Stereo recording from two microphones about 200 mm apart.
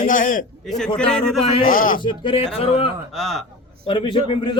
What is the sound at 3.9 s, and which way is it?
Speech, 25° left (ahead or behind).